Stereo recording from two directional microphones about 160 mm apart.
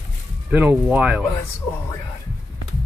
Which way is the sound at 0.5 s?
10° right (ahead or behind).